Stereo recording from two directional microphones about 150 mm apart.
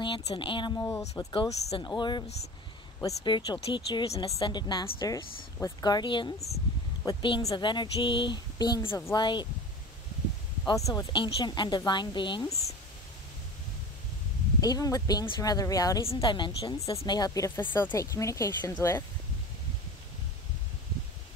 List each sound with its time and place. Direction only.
0.0 s speech: 35° left (ahead or behind)
10.9 s speech: 20° left (ahead or behind)
14.6 s speech: 25° left (ahead or behind)
16.1 s speech: 30° left (ahead or behind); by 19.0 s 15° left (ahead or behind)